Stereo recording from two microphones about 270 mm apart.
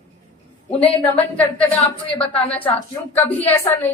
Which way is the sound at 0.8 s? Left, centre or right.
Left.